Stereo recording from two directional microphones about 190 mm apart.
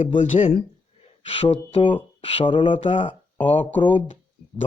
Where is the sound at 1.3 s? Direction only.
30° left (ahead or behind).